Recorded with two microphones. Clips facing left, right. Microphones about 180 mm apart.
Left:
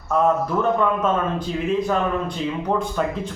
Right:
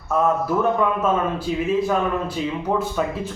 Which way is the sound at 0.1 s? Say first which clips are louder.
Even; 5° right (ahead or behind).